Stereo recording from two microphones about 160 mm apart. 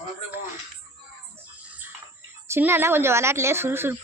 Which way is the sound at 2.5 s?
15° right (ahead or behind).